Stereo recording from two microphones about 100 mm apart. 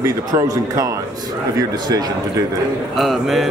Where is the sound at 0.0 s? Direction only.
35° right (ahead or behind).